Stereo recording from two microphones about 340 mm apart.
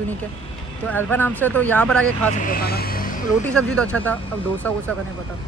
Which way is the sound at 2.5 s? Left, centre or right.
Left.